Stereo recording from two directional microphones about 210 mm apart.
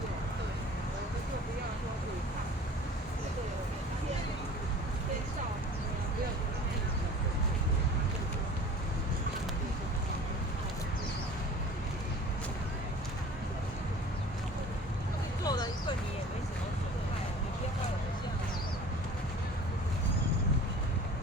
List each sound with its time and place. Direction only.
15.4 s vehicle: 20° left (ahead or behind)